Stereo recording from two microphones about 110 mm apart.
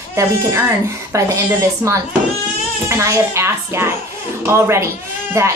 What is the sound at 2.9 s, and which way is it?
Speech, 25° right (ahead or behind).